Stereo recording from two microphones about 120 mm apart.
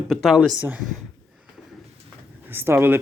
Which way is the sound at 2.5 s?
20° right (ahead or behind).